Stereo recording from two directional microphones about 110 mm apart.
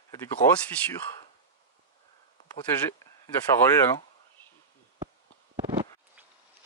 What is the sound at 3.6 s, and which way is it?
Speech, 25° left (ahead or behind).